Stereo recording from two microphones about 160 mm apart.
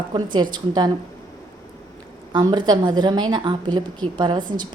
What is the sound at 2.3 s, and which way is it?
A woman's voice, 25° right (ahead or behind).